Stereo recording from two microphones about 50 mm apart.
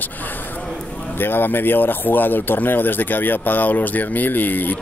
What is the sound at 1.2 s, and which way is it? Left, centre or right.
Speech, left.